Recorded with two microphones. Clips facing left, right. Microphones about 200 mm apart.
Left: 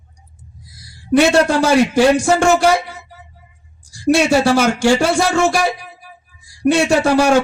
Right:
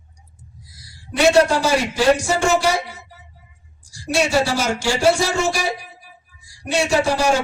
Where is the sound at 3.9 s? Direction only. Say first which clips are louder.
Left 6 dB; 55° left (ahead or behind).